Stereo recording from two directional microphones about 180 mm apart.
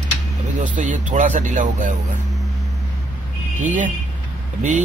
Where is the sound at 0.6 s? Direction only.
45° right (ahead or behind).